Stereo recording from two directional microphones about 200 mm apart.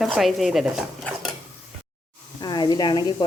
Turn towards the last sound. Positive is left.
turn(degrees=20)  # may be behind; listen again after turning